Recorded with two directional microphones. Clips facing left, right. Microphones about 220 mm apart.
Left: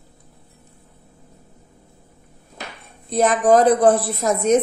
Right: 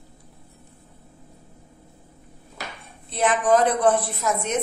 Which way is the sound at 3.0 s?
40° left (ahead or behind).